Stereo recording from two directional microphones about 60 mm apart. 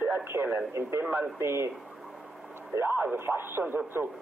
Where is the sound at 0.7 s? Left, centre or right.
Right.